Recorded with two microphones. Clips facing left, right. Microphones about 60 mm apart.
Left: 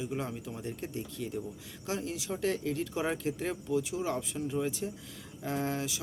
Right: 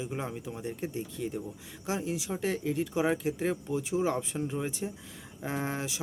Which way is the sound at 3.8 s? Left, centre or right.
Right.